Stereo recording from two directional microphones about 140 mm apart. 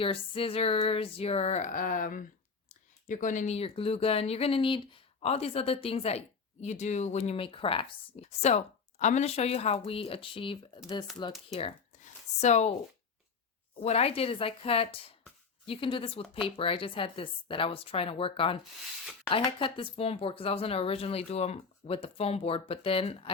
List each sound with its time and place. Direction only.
0.0 s speech: 40° left (ahead or behind); by 2.2 s 75° left (ahead or behind)
3.1 s speech: 65° left (ahead or behind); by 11.7 s 45° left (ahead or behind)
11.9 s a sound: 55° left (ahead or behind)
13.8 s a woman's voice: 45° left (ahead or behind)